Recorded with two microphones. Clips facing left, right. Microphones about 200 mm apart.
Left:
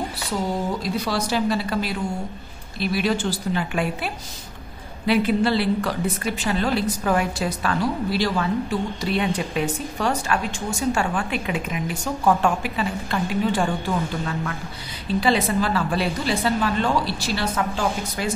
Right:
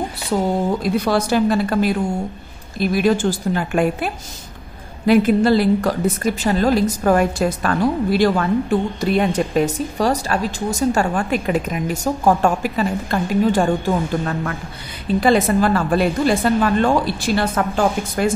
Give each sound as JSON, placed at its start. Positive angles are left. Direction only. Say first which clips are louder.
{"t": 0.8, "sound": "a woman's voice", "louder": "right 6 dB", "side_deg": -55}